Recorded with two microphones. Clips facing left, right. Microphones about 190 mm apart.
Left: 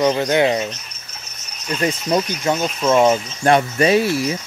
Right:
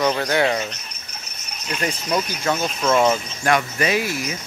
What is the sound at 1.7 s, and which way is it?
Speech, 25° left (ahead or behind).